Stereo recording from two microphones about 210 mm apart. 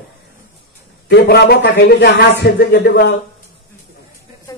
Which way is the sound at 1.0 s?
50° left (ahead or behind).